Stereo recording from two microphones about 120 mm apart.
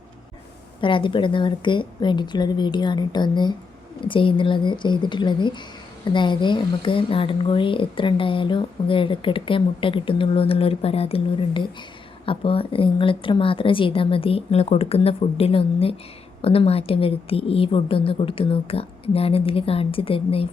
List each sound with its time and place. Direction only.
0.8 s a woman's voice: 45° left (ahead or behind)